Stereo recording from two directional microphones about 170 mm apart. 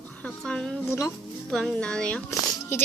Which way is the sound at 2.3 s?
15° left (ahead or behind).